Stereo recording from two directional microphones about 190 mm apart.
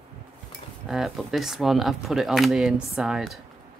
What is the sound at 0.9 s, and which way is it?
Speech, centre (ahead or behind).